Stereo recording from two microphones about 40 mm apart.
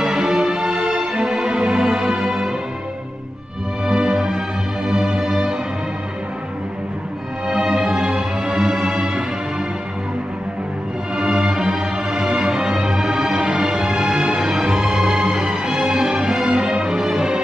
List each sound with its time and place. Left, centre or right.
0.0 s music: centre
3.8 s music: centre
7.4 s music: centre
11.1 s music: right